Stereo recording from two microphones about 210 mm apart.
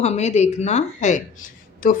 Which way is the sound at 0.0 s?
30° left (ahead or behind).